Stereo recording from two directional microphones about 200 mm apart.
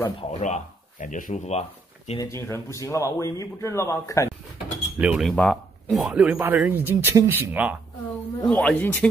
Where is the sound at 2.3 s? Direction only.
15° left (ahead or behind).